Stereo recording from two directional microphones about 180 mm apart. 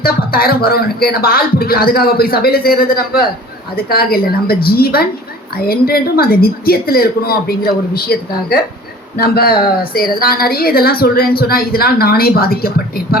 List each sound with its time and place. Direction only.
0.0 s a woman's voice: 55° left (ahead or behind)